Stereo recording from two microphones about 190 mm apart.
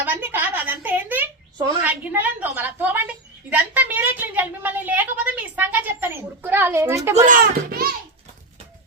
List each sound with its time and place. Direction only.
0.0 s a sound: 10° right (ahead or behind)
1.8 s a woman's voice: 10° right (ahead or behind)
7.3 s a child's voice: 50° right (ahead or behind)